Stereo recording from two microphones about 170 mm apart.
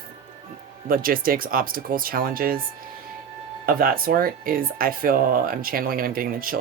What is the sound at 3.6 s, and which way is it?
Speech, 60° right (ahead or behind).